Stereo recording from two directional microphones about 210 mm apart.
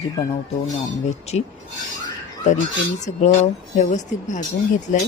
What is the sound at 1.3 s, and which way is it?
Speech, 30° left (ahead or behind).